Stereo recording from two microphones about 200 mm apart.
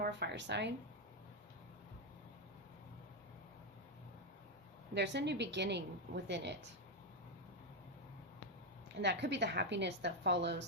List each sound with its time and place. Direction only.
0.0 s a woman's voice: 60° right (ahead or behind)
4.9 s a woman's voice: 60° right (ahead or behind)
9.0 s a woman's voice: 60° right (ahead or behind)